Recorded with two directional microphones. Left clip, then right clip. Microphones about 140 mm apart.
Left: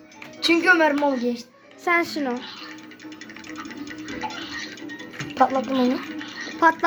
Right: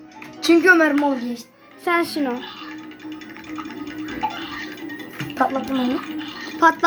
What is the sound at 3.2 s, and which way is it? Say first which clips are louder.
Music: right 2 dB; 75° right (ahead or behind).